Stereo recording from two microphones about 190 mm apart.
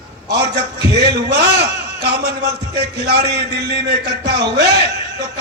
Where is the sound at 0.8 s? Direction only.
60° right (ahead or behind).